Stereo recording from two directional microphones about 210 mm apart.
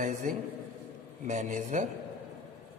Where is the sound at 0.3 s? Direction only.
40° right (ahead or behind).